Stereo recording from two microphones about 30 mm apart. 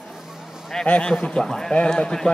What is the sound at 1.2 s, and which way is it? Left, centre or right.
Speech, left.